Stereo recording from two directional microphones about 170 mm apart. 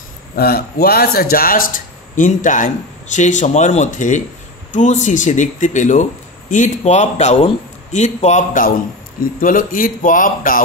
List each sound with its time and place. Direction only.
0.4 s a man's voice: 65° left (ahead or behind)